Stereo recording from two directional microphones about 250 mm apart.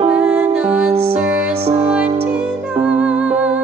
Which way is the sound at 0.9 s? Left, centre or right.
Right.